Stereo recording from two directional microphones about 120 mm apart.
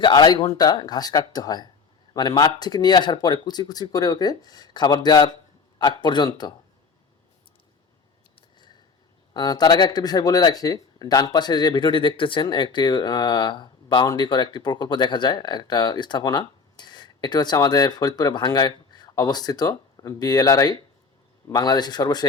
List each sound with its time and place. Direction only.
0.0 s speech: 35° left (ahead or behind)
8.4 s a sound: 40° left (ahead or behind)
9.3 s speech: 35° left (ahead or behind)